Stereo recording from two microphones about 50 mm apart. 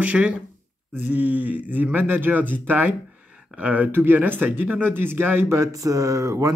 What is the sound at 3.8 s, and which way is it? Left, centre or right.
Speech, right.